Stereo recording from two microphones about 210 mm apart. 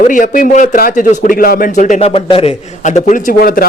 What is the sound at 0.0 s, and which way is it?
A man's voice, 40° left (ahead or behind).